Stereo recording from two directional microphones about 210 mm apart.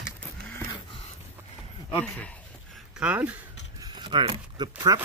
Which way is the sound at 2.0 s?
5° left (ahead or behind).